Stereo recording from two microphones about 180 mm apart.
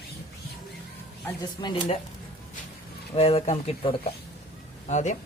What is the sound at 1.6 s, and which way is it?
Speech, 35° left (ahead or behind).